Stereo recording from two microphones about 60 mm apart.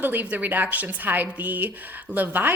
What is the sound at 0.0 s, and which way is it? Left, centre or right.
A woman's voice, right.